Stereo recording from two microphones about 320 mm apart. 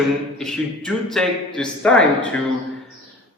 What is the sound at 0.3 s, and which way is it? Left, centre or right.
Speech, centre.